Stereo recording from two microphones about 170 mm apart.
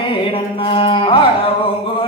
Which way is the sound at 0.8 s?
30° left (ahead or behind).